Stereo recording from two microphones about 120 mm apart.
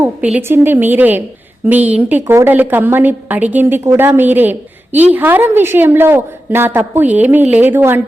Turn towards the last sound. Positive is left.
turn(degrees=-20)  # may be behind; listen again after turning